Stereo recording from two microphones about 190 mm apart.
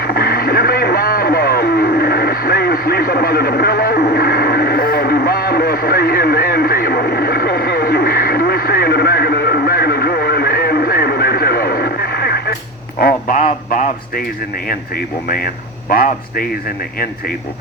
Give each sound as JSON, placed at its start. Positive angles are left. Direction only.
{"t": 0.0, "sound": "radio", "side_deg": 55}
{"t": 13.0, "sound": "a sound", "side_deg": 50}
{"t": 14.7, "sound": "a man's voice", "side_deg": 50}